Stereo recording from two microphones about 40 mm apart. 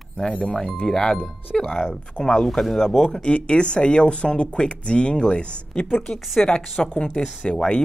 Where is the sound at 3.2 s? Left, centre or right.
Left.